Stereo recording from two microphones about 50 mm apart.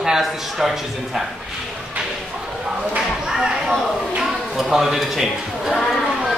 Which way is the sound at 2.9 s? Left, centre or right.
Centre.